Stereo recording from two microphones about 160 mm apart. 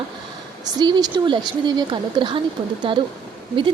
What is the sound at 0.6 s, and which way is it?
A woman's voice, 25° right (ahead or behind).